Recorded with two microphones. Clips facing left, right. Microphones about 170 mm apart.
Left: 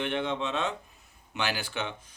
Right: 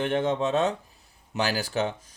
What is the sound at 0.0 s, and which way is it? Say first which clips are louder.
Speech: right 5 dB; 40° right (ahead or behind).